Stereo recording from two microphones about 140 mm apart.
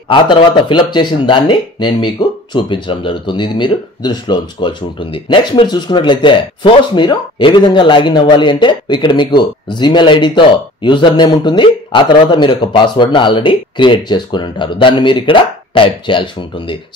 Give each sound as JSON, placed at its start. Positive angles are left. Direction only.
{"t": 0.1, "sound": "speech", "side_deg": 35}